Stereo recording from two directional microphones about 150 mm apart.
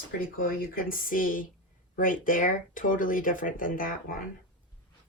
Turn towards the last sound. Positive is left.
turn(degrees=70)  # may be behind; listen again after turning